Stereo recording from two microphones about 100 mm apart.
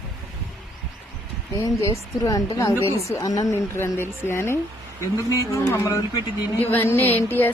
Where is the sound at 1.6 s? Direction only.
35° left (ahead or behind).